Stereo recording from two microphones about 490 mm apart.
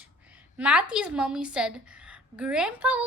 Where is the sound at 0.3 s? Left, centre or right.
Centre.